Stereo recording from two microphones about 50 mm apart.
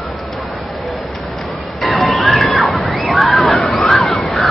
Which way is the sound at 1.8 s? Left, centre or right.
Centre.